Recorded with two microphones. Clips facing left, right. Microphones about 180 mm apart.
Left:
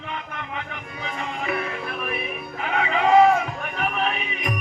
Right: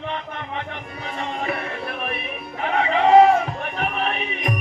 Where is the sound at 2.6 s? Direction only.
35° right (ahead or behind).